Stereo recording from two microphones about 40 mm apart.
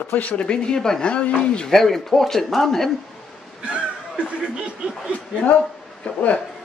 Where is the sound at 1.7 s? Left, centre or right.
Centre.